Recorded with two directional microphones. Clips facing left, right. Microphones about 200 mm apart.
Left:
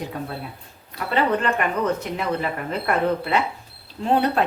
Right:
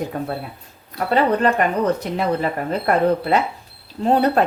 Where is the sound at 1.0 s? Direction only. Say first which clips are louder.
Right 4 dB; 35° right (ahead or behind).